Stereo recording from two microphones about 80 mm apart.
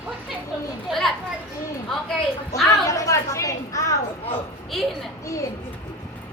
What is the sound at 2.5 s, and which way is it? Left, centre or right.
A woman's voice, left.